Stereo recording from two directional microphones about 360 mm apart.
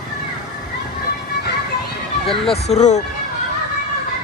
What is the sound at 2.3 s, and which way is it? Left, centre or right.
Speech, centre.